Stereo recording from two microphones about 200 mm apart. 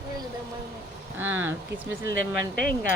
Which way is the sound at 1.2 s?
10° right (ahead or behind).